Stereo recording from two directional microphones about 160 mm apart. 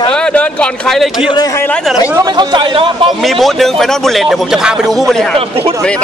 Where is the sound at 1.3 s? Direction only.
20° left (ahead or behind).